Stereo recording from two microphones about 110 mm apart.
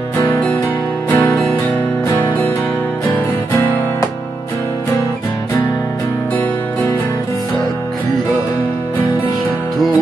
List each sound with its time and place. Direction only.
0.2 s music: 15° left (ahead or behind)